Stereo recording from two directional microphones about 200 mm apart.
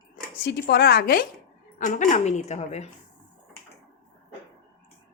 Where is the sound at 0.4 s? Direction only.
55° left (ahead or behind); by 2.9 s 35° left (ahead or behind).